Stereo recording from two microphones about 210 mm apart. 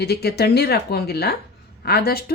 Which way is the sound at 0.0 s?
50° left (ahead or behind).